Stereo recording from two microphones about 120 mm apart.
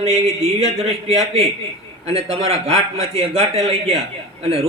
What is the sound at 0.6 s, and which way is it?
A man's voice, 60° right (ahead or behind).